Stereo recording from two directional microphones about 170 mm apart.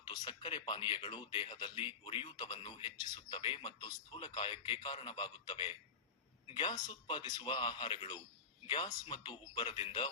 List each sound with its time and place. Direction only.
0.1 s speech: 25° left (ahead or behind)